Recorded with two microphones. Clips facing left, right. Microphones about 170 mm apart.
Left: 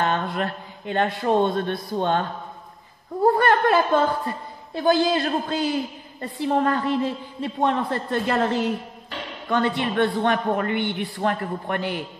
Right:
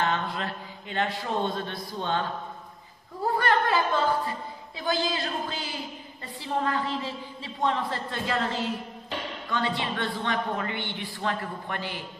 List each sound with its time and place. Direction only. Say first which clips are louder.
0.0 s a man's voice: left 4 dB; 55° left (ahead or behind)
3.3 s a woman's voice: left 6 dB; 55° left (ahead or behind)